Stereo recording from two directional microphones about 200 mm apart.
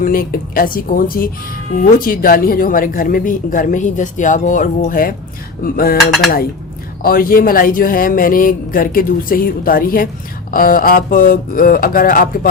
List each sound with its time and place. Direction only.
0.0 s speech: 45° left (ahead or behind)
7.0 s speech: 45° left (ahead or behind)